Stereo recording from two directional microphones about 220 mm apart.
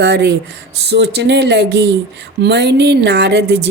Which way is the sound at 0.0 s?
50° right (ahead or behind).